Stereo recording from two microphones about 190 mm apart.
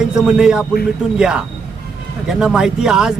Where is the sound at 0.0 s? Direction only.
5° right (ahead or behind).